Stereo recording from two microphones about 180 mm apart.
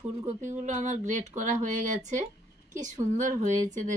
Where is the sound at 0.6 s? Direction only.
40° right (ahead or behind).